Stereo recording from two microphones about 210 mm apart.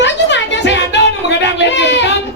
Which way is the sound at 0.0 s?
60° left (ahead or behind).